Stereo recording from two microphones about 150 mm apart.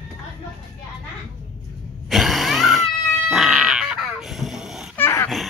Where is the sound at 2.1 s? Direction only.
Centre (ahead or behind).